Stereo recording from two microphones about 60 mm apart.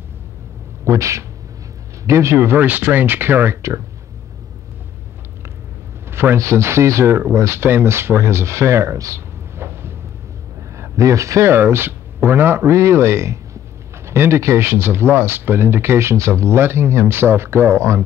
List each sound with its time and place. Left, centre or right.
0.8 s speech: right
6.0 s speech: right
9.6 s a sound: right
10.8 s a man's voice: right
11.5 s speech: right